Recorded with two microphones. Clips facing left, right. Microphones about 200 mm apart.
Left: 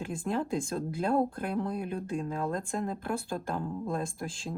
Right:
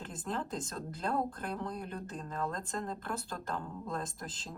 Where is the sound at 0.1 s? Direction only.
10° left (ahead or behind).